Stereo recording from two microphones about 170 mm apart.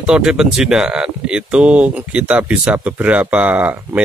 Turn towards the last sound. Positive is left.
turn(degrees=-10)  # may be behind; listen again after turning